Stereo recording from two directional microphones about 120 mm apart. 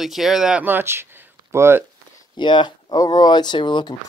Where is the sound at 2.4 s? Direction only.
40° left (ahead or behind).